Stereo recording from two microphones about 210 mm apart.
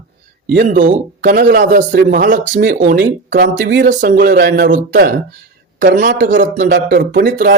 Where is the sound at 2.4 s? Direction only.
55° right (ahead or behind).